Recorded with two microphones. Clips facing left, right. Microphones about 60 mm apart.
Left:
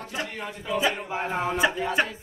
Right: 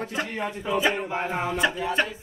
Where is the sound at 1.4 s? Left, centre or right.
Centre.